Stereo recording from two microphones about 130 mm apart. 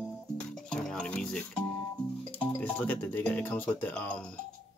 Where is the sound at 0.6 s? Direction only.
5° left (ahead or behind).